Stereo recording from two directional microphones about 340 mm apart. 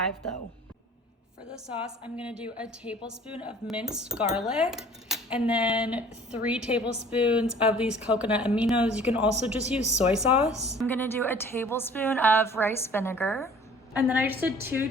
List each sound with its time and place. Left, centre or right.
2.1 s speech: centre
9.8 s speech: centre
10.2 s speech: centre
10.5 s speech: centre
10.8 s a woman's voice: centre
13.9 s speech: centre